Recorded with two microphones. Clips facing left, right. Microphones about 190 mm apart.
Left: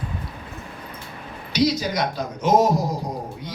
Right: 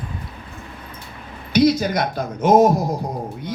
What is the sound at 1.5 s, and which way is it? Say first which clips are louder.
Speech: right 5 dB; 55° right (ahead or behind).